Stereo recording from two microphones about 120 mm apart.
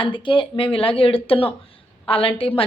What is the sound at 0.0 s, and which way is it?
A woman's voice, 45° left (ahead or behind).